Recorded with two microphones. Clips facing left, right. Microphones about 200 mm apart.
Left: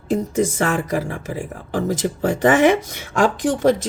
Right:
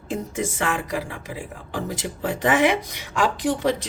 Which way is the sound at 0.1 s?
40° left (ahead or behind).